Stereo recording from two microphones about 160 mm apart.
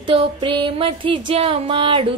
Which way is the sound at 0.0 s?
30° right (ahead or behind).